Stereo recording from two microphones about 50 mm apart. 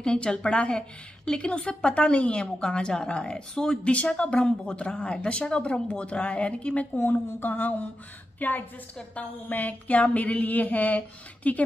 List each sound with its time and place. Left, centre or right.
0.0 s a woman's voice: centre
3.8 s a woman's voice: left
7.0 s a sound: left